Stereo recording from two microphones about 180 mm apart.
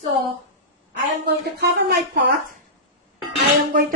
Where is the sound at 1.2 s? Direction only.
65° right (ahead or behind).